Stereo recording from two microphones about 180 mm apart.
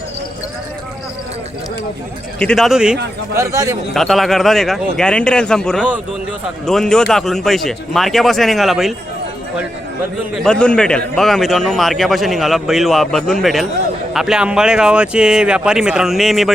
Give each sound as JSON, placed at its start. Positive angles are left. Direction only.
{"t": 2.4, "sound": "a man's voice", "side_deg": 5}
{"t": 3.3, "sound": "a man's voice", "side_deg": -15}
{"t": 3.9, "sound": "a man's voice", "side_deg": 0}
{"t": 10.4, "sound": "a man's voice", "side_deg": 5}